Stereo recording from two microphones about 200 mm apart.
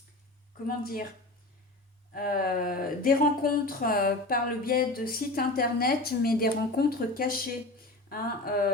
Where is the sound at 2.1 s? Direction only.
45° left (ahead or behind).